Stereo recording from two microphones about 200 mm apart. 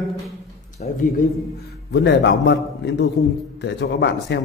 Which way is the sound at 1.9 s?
55° left (ahead or behind).